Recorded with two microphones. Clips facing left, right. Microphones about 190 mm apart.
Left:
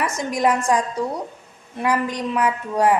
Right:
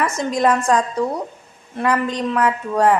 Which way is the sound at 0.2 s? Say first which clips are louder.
Right 2 dB; 15° left (ahead or behind).